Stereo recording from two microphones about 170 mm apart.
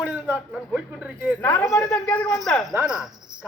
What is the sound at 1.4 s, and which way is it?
A man's voice, 10° left (ahead or behind).